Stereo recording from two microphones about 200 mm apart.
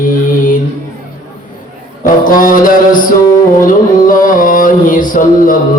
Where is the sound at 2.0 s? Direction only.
45° left (ahead or behind).